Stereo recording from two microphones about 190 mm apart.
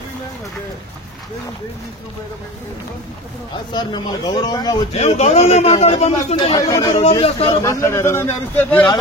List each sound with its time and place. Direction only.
3.7 s speech: 20° left (ahead or behind)
4.9 s a man's voice: 35° left (ahead or behind)
6.3 s speech: 20° left (ahead or behind)
7.0 s a man's voice: 30° left (ahead or behind)
7.6 s a man's voice: 15° left (ahead or behind)